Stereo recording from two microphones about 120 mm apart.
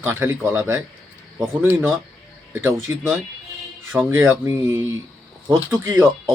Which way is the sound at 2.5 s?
20° right (ahead or behind).